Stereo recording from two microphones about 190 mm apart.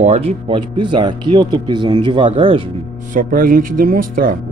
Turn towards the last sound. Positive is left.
turn(degrees=-50)  # may be behind; listen again after turning